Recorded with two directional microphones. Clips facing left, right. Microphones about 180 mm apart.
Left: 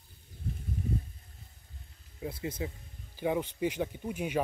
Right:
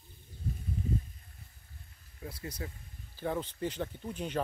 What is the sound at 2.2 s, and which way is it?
Speech, 20° left (ahead or behind).